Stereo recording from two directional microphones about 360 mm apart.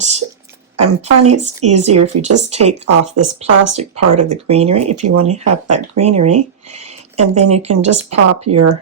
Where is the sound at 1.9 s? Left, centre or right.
Right.